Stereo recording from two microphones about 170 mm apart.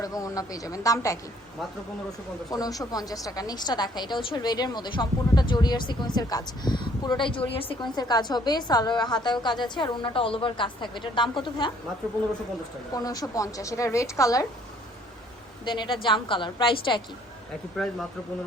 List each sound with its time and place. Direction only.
0.0 s a woman's voice: 20° left (ahead or behind)
2.5 s a woman's voice: 20° left (ahead or behind)
12.9 s a woman's voice: 20° left (ahead or behind)
15.6 s a woman's voice: 25° left (ahead or behind)
17.8 s speech: centre (ahead or behind)